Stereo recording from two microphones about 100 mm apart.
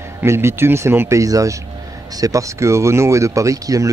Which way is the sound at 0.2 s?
25° right (ahead or behind).